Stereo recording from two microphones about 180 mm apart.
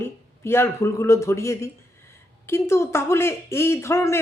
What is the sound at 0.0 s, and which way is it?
Speech, 15° left (ahead or behind).